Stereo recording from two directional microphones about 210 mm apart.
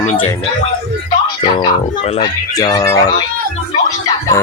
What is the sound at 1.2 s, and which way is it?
Speech, 20° left (ahead or behind).